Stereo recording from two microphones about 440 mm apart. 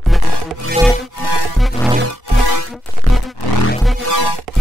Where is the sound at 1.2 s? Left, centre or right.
Left.